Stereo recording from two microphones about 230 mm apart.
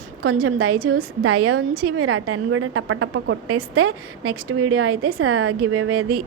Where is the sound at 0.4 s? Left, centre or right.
Right.